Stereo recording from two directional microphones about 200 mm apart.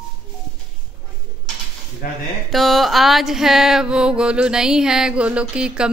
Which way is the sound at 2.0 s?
45° left (ahead or behind).